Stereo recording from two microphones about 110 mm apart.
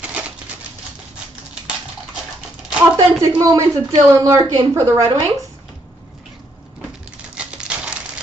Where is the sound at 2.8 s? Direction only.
30° right (ahead or behind).